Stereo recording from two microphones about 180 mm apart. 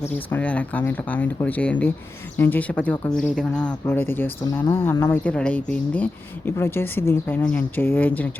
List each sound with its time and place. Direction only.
0.3 s speech: 10° left (ahead or behind)